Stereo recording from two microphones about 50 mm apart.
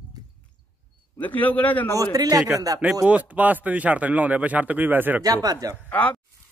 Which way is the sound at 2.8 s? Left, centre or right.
Right.